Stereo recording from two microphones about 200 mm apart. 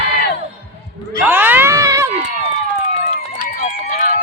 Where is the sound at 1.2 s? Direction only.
10° right (ahead or behind).